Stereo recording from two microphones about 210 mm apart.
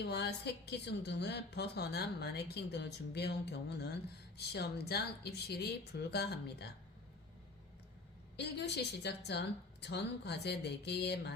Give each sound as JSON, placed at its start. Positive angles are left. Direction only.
{"t": 0.0, "sound": "a woman's voice", "side_deg": 50}
{"t": 8.4, "sound": "a woman's voice", "side_deg": 55}